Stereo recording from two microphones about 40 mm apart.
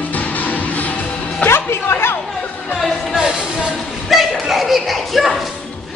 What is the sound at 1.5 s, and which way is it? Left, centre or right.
Chatter, left.